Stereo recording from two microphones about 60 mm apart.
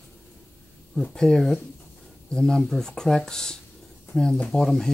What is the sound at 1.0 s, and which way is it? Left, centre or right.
Speech, centre.